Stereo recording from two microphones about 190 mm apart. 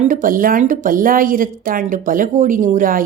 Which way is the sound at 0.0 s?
45° right (ahead or behind).